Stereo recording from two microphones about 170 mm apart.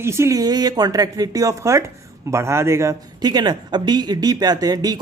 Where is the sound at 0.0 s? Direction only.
15° right (ahead or behind).